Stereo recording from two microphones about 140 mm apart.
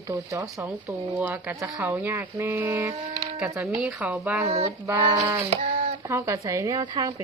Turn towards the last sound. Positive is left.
turn(degrees=-25)  # may be behind; listen again after turning